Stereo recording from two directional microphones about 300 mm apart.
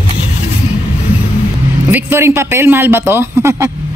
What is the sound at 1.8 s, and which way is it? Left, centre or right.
A man's voice, centre.